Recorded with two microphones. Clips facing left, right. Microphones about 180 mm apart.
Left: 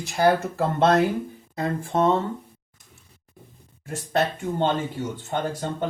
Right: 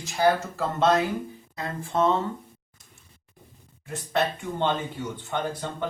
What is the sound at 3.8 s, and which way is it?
Speech, 45° left (ahead or behind).